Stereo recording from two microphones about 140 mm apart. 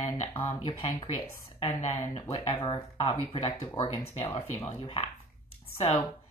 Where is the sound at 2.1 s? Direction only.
30° left (ahead or behind).